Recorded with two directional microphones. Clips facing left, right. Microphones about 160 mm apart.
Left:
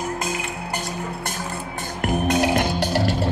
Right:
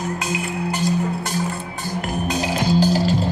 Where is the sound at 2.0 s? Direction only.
60° left (ahead or behind).